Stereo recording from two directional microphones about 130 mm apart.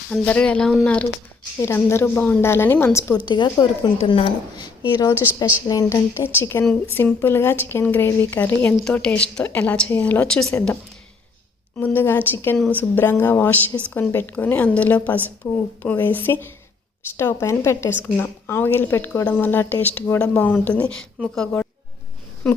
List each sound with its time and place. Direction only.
0.1 s a woman's voice: 10° left (ahead or behind)
3.2 s a woman's voice: 35° left (ahead or behind); by 10.5 s 5° left (ahead or behind)
11.8 s a woman's voice: 15° left (ahead or behind)